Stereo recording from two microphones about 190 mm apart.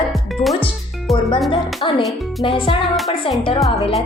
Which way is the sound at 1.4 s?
25° left (ahead or behind).